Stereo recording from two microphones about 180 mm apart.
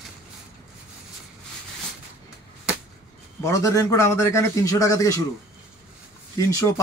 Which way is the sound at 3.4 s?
15° left (ahead or behind).